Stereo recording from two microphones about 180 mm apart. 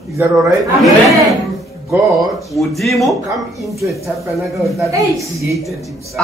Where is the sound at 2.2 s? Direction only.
Centre (ahead or behind).